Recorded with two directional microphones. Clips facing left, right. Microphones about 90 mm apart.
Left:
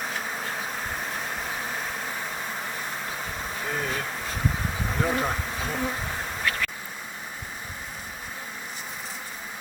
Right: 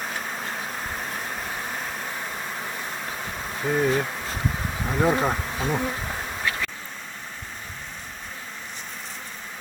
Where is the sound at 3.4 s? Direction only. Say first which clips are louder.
Right 8 dB; 5° right (ahead or behind).